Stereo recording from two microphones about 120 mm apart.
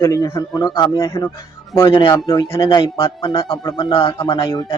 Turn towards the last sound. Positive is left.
turn(degrees=35)  # may be behind; listen again after turning